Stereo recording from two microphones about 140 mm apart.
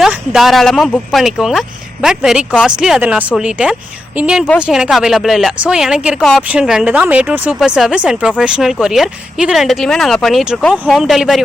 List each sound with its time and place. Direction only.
0.0 s a woman's voice: 5° right (ahead or behind)